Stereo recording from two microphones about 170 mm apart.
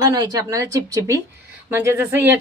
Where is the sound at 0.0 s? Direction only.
25° right (ahead or behind).